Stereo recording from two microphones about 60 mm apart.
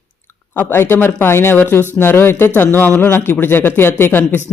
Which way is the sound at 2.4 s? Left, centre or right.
Left.